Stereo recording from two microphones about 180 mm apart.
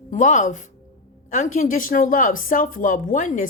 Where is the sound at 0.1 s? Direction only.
45° left (ahead or behind).